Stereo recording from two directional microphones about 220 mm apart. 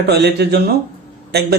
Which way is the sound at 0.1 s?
50° right (ahead or behind).